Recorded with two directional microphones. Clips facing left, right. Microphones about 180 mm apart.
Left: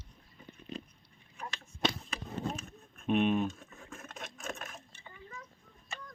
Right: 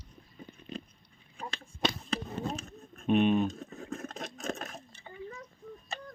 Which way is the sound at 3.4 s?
35° right (ahead or behind).